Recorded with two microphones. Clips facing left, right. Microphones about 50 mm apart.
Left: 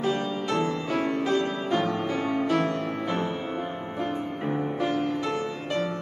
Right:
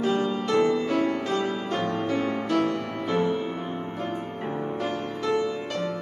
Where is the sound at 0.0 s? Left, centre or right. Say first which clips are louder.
Right 2 dB; centre.